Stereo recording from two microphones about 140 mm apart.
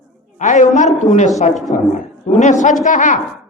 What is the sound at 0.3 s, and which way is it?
A man's voice, 60° left (ahead or behind).